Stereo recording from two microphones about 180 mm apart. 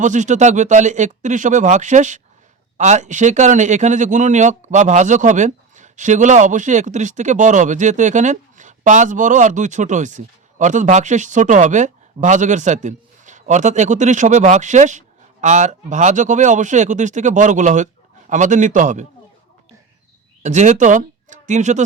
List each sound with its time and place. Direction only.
0.0 s speech: 40° right (ahead or behind)
20.4 s speech: 40° right (ahead or behind)